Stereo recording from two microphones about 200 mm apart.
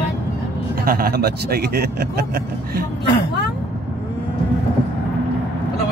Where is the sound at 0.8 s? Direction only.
50° right (ahead or behind).